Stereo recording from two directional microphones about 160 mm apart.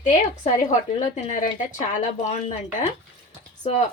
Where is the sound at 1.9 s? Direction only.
45° left (ahead or behind).